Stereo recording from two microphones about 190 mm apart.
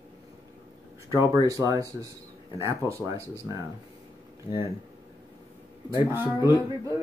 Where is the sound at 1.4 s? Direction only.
15° right (ahead or behind).